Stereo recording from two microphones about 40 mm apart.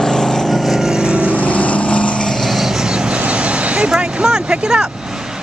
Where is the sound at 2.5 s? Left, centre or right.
Centre.